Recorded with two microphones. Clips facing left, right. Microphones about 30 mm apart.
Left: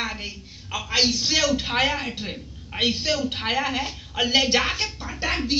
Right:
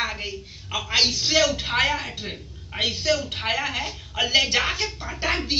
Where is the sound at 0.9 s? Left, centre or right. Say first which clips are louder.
Even; right.